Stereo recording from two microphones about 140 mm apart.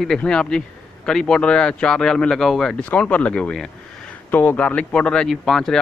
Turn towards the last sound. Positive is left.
turn(degrees=5)  # may be behind; listen again after turning